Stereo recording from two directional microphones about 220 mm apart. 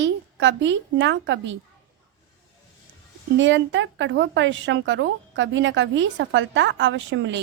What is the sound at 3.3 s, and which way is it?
A woman's voice, 55° right (ahead or behind).